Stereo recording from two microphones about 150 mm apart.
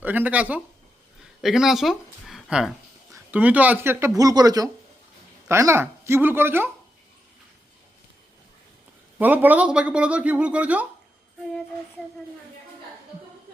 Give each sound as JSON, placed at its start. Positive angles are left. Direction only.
{"t": 0.0, "sound": "speech", "side_deg": -10}
{"t": 9.1, "sound": "speech", "side_deg": -10}